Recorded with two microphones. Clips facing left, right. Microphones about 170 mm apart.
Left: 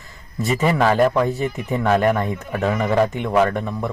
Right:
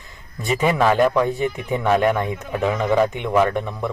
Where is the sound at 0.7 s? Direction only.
5° left (ahead or behind).